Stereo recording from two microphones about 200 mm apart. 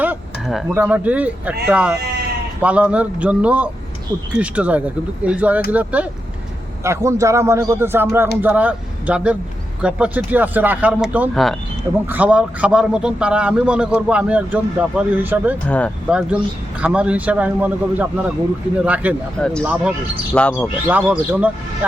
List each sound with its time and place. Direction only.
0.0 s a man's voice: 5° right (ahead or behind)
15.6 s speech: 5° left (ahead or behind)
16.0 s a man's voice: 5° right (ahead or behind)
20.3 s speech: 5° left (ahead or behind)
20.8 s speech: 10° right (ahead or behind)